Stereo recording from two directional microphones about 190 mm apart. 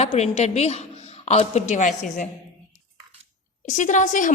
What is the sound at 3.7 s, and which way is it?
Speech, 40° left (ahead or behind).